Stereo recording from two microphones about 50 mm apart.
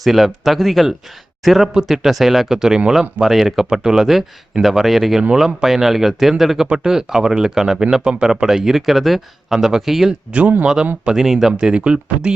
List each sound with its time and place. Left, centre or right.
0.0 s speech: centre
5.3 s speech: centre
5.6 s speech: centre
11.7 s speech: right